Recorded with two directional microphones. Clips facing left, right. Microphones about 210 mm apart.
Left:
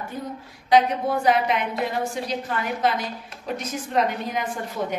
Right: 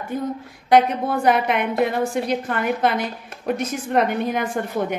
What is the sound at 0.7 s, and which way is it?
A woman's voice, 55° right (ahead or behind).